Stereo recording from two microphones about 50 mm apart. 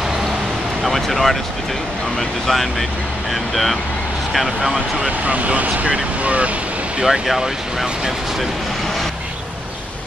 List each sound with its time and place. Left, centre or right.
0.8 s speech: centre
4.3 s speech: centre
5.2 s speech: right
7.1 s speech: centre